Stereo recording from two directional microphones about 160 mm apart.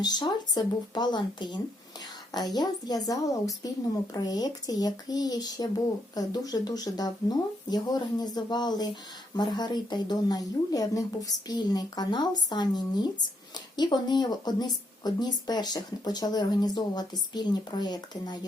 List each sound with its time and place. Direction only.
0.0 s speech: 25° left (ahead or behind)